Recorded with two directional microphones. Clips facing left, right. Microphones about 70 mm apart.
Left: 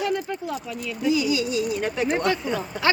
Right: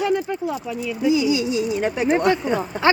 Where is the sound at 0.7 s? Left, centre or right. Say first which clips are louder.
Right 5 dB; centre.